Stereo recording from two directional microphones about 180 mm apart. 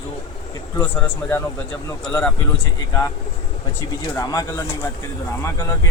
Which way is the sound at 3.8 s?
20° left (ahead or behind).